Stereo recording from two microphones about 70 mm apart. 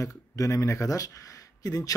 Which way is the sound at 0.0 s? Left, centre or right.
Left.